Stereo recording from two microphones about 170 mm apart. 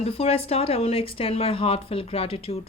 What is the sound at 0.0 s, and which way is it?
Speech, 35° left (ahead or behind).